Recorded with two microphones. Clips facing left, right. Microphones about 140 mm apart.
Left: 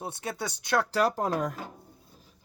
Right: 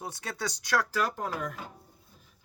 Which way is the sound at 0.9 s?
35° left (ahead or behind).